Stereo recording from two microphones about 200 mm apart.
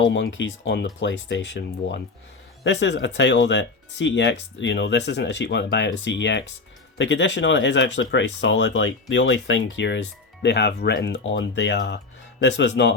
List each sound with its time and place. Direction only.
0.0 s speech: 65° left (ahead or behind)